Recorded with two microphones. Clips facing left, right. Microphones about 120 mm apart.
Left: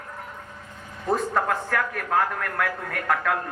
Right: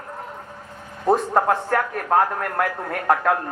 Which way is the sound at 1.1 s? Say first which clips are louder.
Right 5 dB; 30° right (ahead or behind).